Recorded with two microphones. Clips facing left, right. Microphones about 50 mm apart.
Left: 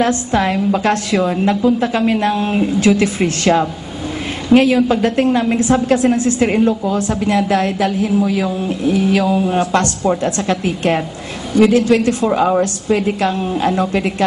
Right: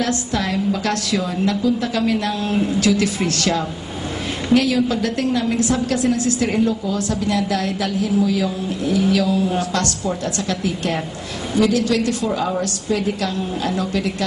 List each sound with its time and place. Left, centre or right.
0.0 s a woman's voice: left